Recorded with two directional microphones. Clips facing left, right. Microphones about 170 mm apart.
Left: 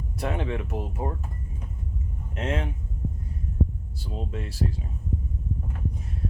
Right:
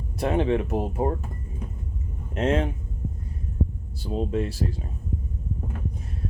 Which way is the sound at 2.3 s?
30° right (ahead or behind).